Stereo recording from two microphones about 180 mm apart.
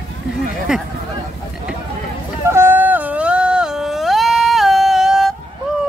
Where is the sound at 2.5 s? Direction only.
15° right (ahead or behind).